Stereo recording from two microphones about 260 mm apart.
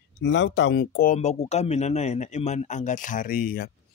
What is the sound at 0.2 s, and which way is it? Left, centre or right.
Speech, left.